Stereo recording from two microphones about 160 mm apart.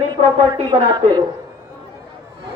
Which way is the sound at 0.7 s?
25° right (ahead or behind).